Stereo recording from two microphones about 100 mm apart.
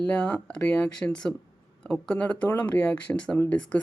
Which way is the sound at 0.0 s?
15° left (ahead or behind).